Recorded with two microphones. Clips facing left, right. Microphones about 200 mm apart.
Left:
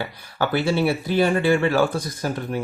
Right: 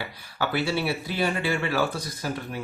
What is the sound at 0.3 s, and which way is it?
Speech, 50° left (ahead or behind).